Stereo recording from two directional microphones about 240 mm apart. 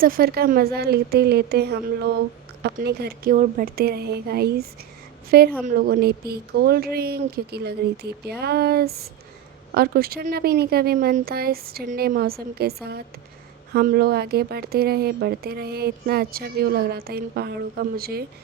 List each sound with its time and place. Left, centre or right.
0.0 s speech: right